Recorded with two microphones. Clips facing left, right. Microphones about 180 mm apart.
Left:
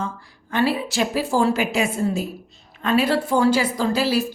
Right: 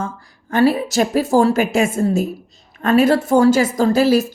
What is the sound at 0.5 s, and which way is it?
A woman's voice, 45° right (ahead or behind).